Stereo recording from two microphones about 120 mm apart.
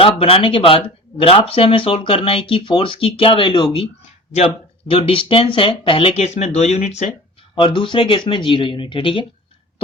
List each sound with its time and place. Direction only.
0.0 s speech: 50° left (ahead or behind); by 7.1 s 65° left (ahead or behind)
7.5 s speech: 45° left (ahead or behind)